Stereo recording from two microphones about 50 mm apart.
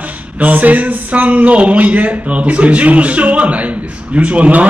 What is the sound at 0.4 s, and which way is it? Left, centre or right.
Speech, right.